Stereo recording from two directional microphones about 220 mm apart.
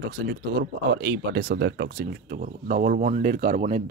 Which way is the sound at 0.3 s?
50° right (ahead or behind).